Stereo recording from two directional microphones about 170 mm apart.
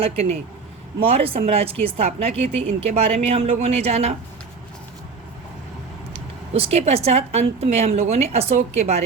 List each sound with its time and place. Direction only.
0.0 s a woman's voice: 35° right (ahead or behind)
6.5 s a woman's voice: 40° right (ahead or behind)